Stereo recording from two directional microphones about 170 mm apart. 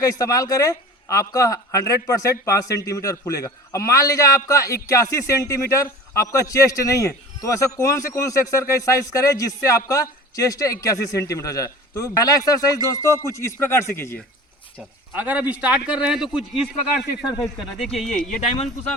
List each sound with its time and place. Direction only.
0.0 s a man's voice: 20° left (ahead or behind)
14.8 s speech: 10° right (ahead or behind)
18.0 s speech: 5° left (ahead or behind)